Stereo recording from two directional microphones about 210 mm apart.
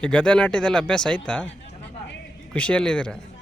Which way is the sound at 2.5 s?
5° left (ahead or behind).